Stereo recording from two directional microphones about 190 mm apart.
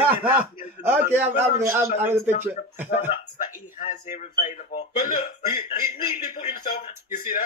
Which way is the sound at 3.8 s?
40° left (ahead or behind).